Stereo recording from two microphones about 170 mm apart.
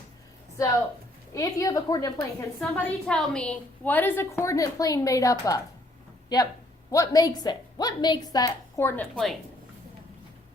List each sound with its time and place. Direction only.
1.3 s a woman's voice: 20° left (ahead or behind)
2.6 s a woman's voice: 5° left (ahead or behind)